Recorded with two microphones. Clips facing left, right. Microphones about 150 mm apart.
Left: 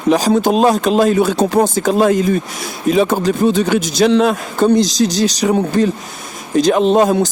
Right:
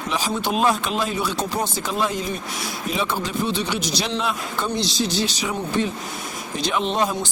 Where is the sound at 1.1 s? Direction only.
55° left (ahead or behind).